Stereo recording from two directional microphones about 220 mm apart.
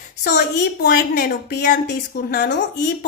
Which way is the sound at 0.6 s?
40° left (ahead or behind).